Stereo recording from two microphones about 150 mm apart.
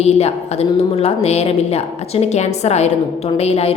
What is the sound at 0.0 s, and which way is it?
A woman's voice, 45° left (ahead or behind).